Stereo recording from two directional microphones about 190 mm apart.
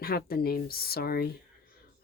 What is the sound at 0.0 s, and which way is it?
Speech, 55° left (ahead or behind).